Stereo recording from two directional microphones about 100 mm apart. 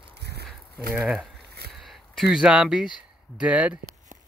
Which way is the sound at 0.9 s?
10° right (ahead or behind).